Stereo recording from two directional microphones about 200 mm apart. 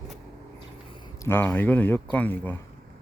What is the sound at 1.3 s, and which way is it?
Speech, 10° left (ahead or behind).